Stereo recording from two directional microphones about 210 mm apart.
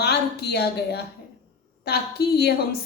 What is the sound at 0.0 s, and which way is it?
A woman's voice, 50° left (ahead or behind).